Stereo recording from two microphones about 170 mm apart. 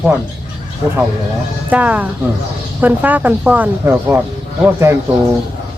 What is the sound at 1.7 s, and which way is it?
Speech, 10° right (ahead or behind).